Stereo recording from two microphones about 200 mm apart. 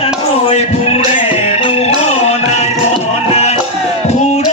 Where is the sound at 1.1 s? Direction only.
30° left (ahead or behind).